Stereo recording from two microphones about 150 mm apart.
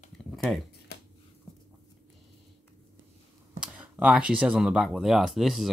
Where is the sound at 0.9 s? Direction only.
90° left.